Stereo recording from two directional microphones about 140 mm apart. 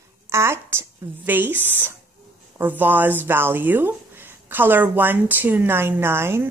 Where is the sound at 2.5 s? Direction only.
15° right (ahead or behind).